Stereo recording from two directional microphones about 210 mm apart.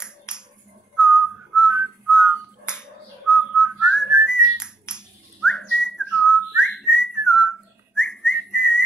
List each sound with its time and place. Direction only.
0.9 s whistling: 5° right (ahead or behind)